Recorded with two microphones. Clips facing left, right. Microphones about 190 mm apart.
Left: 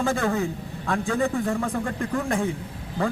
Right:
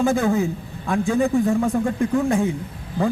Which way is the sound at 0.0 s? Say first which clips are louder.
Right 5 dB; 15° right (ahead or behind).